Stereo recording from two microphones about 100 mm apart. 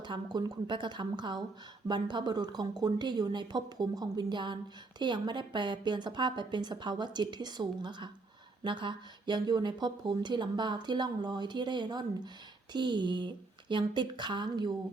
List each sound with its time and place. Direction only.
0.0 s speech: 50° right (ahead or behind)